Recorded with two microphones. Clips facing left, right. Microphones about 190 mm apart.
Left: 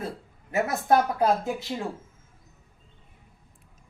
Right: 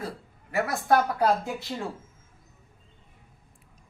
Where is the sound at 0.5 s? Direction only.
20° left (ahead or behind).